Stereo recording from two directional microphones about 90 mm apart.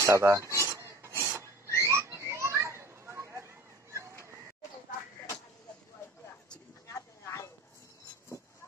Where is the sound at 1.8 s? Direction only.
30° right (ahead or behind).